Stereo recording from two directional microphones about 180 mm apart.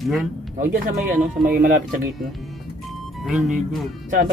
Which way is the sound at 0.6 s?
50° right (ahead or behind).